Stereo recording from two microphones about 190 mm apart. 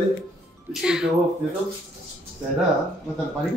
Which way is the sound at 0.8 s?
5° right (ahead or behind).